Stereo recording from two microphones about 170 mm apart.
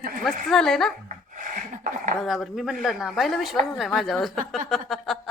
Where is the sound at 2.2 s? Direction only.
Centre (ahead or behind).